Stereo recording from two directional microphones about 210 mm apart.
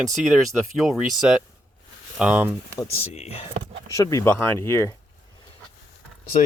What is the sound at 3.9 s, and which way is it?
Speech, 15° left (ahead or behind).